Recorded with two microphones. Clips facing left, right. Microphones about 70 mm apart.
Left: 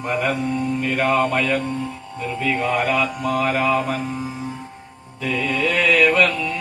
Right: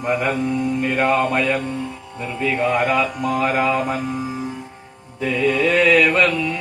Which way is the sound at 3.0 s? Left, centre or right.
Centre.